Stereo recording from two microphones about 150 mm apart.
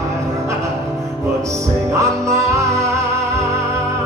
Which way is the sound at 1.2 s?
20° right (ahead or behind).